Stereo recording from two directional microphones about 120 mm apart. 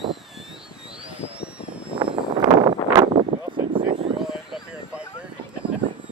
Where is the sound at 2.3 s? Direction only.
40° right (ahead or behind).